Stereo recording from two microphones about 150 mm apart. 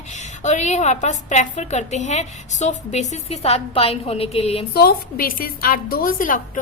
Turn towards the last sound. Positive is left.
turn(degrees=65)  # may be behind; listen again after turning